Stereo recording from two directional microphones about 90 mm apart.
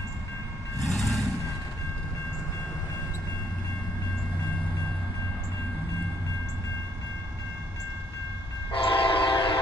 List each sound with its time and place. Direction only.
0.7 s reversing beeps: 5° left (ahead or behind)
8.7 s train: 75° left (ahead or behind)